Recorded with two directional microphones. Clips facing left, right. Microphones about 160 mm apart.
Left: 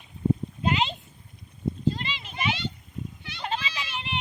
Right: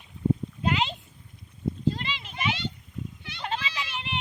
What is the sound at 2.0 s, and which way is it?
Children playing, 40° left (ahead or behind).